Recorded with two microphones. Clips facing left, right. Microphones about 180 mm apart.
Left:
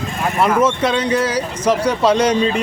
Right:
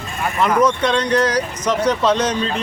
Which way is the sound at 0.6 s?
25° left (ahead or behind).